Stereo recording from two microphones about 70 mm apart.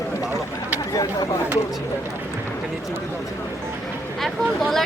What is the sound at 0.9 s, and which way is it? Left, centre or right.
Speech, left.